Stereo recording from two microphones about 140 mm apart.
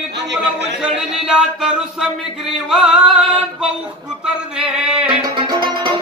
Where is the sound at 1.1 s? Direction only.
5° right (ahead or behind).